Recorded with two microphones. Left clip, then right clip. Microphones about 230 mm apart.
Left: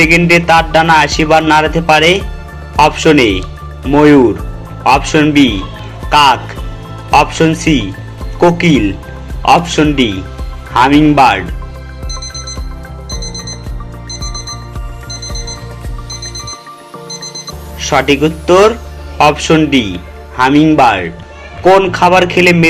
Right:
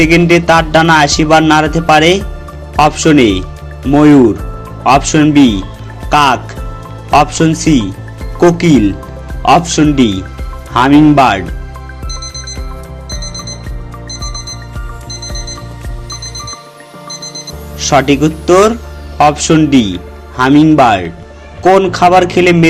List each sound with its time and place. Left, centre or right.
0.0 s a man's voice: right
12.0 s alarm clock: centre
17.7 s a man's voice: right